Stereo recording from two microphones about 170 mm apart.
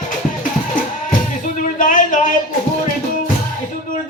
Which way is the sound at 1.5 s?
50° left (ahead or behind).